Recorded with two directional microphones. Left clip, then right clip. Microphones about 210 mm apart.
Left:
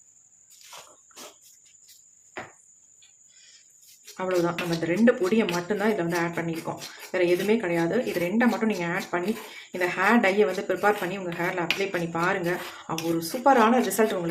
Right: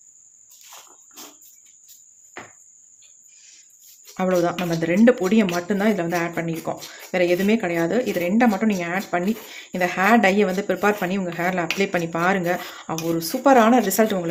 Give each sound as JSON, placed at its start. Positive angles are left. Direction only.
{"t": 4.2, "sound": "speech", "side_deg": -40}